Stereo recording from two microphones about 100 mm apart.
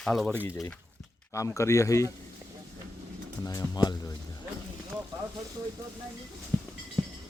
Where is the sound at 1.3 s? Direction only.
30° left (ahead or behind).